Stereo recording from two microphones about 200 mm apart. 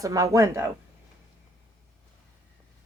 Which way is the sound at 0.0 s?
15° right (ahead or behind).